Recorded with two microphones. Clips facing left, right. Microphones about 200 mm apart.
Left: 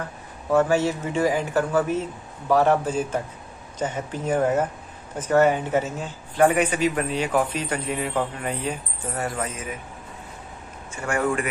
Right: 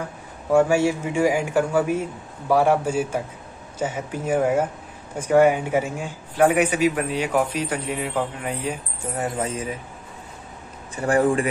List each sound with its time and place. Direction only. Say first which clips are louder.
0.5 s a man's voice: right 2 dB; 10° right (ahead or behind); by 9.8 s 30° right (ahead or behind)
11.0 s speech: right 5 dB; 35° right (ahead or behind)